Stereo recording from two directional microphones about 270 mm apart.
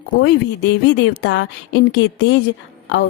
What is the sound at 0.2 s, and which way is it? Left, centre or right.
A woman's voice, left.